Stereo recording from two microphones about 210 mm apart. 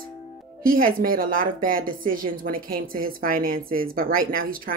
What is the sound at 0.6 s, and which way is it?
Speech, 45° right (ahead or behind).